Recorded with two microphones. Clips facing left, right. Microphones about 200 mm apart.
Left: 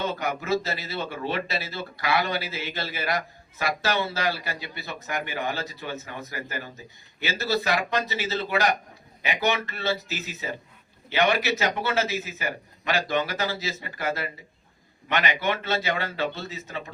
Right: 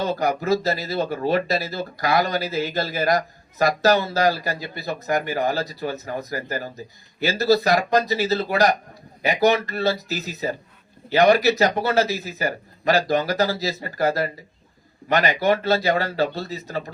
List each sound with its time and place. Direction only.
0.0 s speech: 35° right (ahead or behind)